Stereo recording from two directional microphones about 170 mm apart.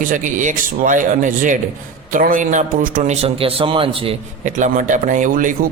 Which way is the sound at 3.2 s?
35° right (ahead or behind).